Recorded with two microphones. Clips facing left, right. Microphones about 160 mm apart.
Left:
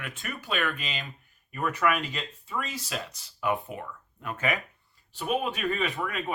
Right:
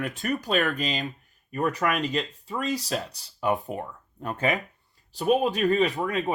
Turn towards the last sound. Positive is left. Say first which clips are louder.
# right 5 dB
turn(degrees=-30)  # may be behind; listen again after turning